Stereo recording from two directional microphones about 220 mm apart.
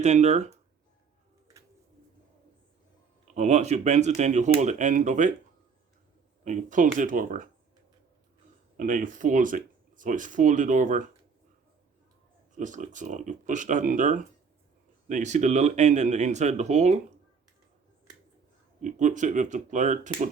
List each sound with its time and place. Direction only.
0.0 s speech: 30° right (ahead or behind)
3.3 s speech: 30° right (ahead or behind)
6.4 s speech: 35° right (ahead or behind)
8.8 s speech: 35° right (ahead or behind)
12.5 s speech: 35° right (ahead or behind)
18.8 s speech: 35° right (ahead or behind)